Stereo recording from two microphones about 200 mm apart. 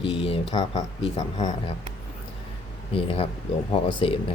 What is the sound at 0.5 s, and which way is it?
Speech, 20° left (ahead or behind).